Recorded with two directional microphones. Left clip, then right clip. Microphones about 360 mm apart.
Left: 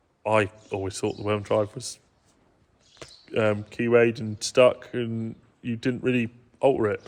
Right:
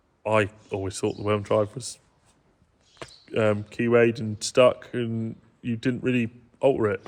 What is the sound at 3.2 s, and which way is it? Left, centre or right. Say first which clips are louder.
Speech: right 1 dB; centre.